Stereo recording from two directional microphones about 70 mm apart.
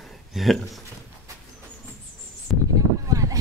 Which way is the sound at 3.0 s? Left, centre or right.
Right.